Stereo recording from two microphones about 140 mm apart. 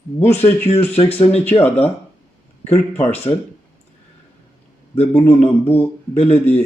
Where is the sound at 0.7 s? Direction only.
45° left (ahead or behind).